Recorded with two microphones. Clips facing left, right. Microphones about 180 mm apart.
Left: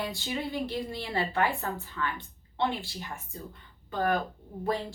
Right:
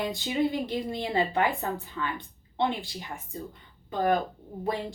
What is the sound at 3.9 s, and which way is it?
Speech, 15° right (ahead or behind).